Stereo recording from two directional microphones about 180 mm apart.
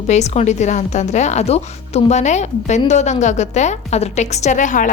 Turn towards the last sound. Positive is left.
turn(degrees=45)  # may be behind; listen again after turning